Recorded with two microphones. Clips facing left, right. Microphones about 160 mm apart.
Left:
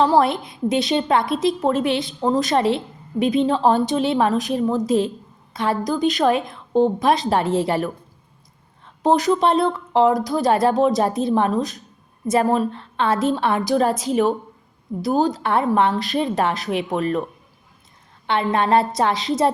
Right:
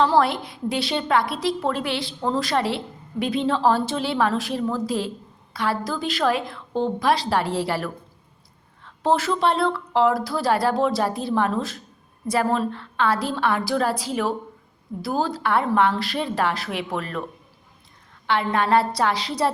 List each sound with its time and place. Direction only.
0.0 s a woman's voice: 20° left (ahead or behind)
18.3 s a woman's voice: 25° left (ahead or behind)